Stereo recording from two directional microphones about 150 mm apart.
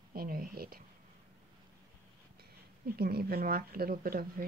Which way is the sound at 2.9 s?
90° right.